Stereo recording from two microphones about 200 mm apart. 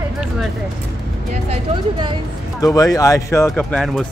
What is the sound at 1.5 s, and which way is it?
Speech, 25° right (ahead or behind).